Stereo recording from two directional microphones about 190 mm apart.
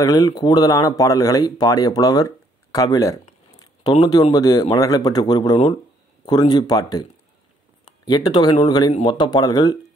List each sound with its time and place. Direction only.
0.0 s speech: 20° left (ahead or behind)